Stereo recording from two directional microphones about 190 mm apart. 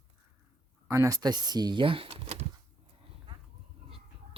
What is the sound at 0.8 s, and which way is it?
Speech, 15° right (ahead or behind).